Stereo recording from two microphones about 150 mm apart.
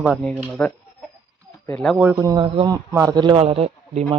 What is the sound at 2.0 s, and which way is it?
Speech, 15° right (ahead or behind).